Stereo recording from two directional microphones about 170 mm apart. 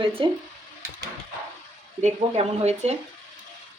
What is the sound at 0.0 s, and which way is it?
Speech, 30° right (ahead or behind).